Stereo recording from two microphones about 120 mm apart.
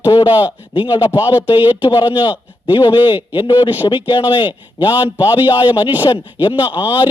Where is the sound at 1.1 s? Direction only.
15° right (ahead or behind).